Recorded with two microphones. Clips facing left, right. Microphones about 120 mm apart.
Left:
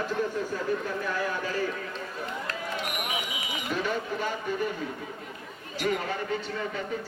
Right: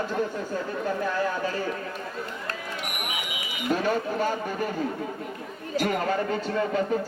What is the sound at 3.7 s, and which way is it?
A man's voice, 45° right (ahead or behind).